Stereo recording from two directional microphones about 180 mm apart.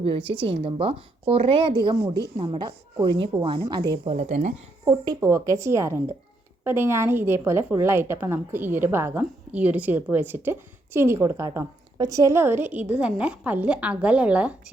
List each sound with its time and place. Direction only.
0.3 s speech: 30° right (ahead or behind)
4.9 s a woman's voice: 20° right (ahead or behind)